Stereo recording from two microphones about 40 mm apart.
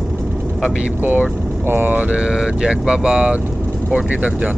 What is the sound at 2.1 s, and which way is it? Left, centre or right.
Speech, right.